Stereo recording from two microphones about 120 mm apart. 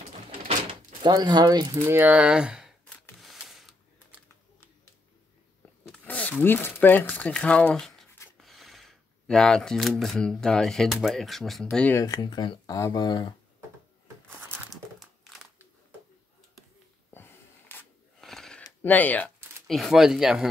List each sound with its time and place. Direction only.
0.7 s speech: 40° right (ahead or behind)
1.9 s speech: 15° right (ahead or behind)
3.2 s mechanisms: centre (ahead or behind)
6.0 s speech: 15° left (ahead or behind)
11.7 s speech: 10° left (ahead or behind)
12.0 s speech: 35° left (ahead or behind)
14.7 s crumpling: centre (ahead or behind)
17.1 s a sound: 15° left (ahead or behind)
18.2 s a sound: 5° left (ahead or behind)
18.8 s speech: 15° left (ahead or behind)
19.7 s speech: centre (ahead or behind)